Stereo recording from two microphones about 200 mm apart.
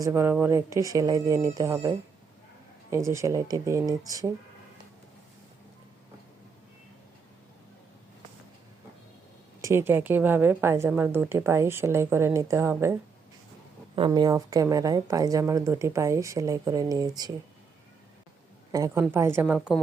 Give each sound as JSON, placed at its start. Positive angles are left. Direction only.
{"t": 0.0, "sound": "a woman's voice", "side_deg": -10}
{"t": 9.6, "sound": "a woman's voice", "side_deg": -15}
{"t": 18.7, "sound": "a woman's voice", "side_deg": -15}
{"t": 19.5, "sound": "a woman's voice", "side_deg": 0}